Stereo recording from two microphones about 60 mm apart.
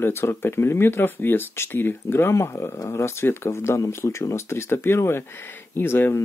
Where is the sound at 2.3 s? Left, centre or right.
Left.